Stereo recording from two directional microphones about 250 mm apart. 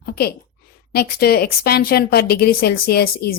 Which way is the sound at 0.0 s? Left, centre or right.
Left.